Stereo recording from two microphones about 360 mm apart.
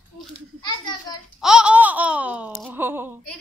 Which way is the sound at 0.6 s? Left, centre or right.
Centre.